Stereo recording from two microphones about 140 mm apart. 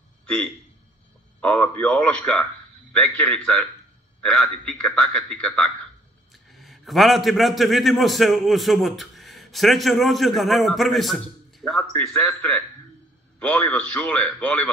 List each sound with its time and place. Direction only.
1.4 s a man's voice: 10° left (ahead or behind)